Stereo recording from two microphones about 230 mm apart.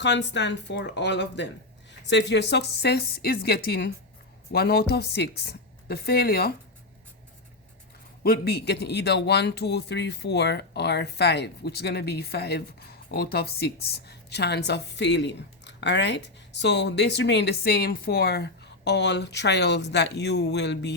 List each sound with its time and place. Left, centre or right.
0.0 s a woman's voice: left
8.2 s a woman's voice: left